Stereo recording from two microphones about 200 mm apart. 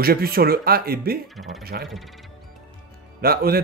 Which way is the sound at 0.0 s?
50° right (ahead or behind).